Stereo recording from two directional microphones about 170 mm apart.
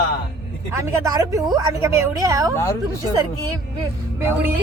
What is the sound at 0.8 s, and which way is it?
A woman's voice, 20° right (ahead or behind).